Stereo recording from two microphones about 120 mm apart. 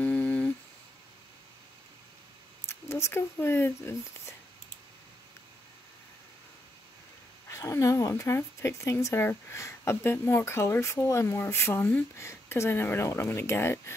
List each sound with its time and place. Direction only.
0.0 s humming: 10° left (ahead or behind)
2.7 s speech: 20° left (ahead or behind)
7.4 s speech: 25° left (ahead or behind)